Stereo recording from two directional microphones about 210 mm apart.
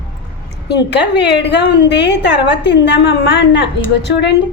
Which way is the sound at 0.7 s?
55° left (ahead or behind).